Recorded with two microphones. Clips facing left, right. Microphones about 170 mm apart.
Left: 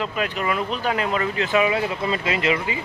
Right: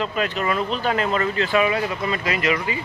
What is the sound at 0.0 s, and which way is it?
Speech, 10° left (ahead or behind).